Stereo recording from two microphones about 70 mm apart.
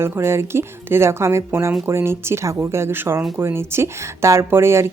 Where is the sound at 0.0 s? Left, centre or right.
Right.